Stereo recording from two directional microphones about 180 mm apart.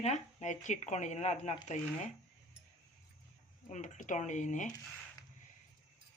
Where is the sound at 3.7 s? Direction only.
40° left (ahead or behind).